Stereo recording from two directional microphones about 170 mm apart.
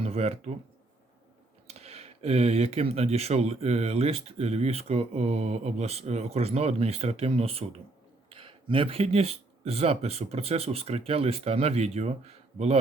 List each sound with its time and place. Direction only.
0.0 s speech: 35° right (ahead or behind)
1.6 s speech: 40° right (ahead or behind)